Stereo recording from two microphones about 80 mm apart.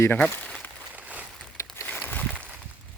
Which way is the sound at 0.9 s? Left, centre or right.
Centre.